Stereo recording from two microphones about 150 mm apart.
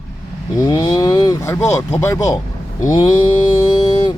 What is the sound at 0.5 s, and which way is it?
Speech, 25° left (ahead or behind).